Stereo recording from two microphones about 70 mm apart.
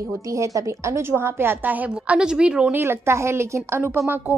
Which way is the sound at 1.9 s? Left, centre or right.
Centre.